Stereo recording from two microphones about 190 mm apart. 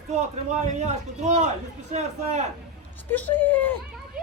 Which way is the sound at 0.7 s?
40° right (ahead or behind).